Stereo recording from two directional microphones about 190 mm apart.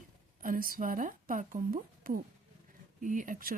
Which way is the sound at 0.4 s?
50° right (ahead or behind).